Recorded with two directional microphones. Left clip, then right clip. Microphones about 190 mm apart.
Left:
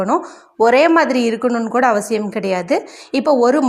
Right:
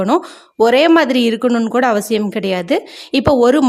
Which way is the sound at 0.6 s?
25° right (ahead or behind).